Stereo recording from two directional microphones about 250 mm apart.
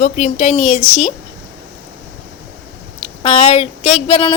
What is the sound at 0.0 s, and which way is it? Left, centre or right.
Speech, left.